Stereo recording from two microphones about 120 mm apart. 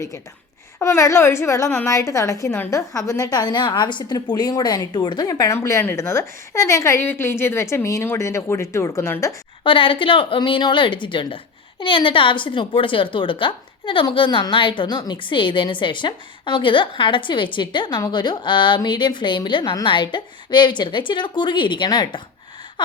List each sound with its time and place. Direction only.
0.8 s a woman's voice: 25° left (ahead or behind)
9.6 s a woman's voice: 45° left (ahead or behind)